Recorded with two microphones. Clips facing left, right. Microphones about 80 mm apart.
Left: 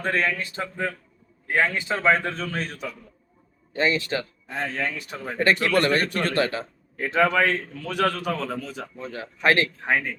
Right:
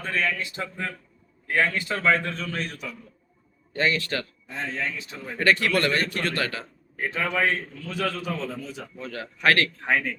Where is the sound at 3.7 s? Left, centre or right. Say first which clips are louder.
Left 2 dB; left.